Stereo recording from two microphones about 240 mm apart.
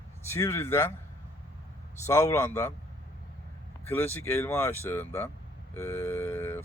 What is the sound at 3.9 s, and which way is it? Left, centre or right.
Speech, centre.